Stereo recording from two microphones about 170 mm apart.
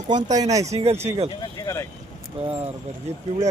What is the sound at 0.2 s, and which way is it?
Speech, 45° right (ahead or behind).